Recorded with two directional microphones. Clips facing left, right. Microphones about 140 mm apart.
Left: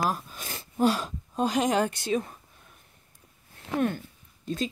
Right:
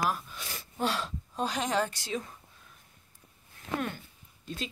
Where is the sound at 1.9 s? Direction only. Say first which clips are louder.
Left 8 dB; 55° left (ahead or behind).